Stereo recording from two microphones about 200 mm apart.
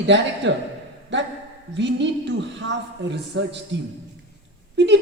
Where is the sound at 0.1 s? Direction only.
60° right (ahead or behind).